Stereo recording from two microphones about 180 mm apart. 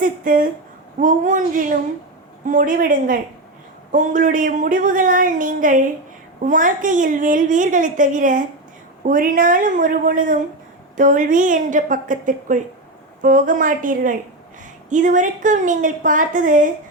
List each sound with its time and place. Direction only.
0.0 s a woman's voice: 50° right (ahead or behind)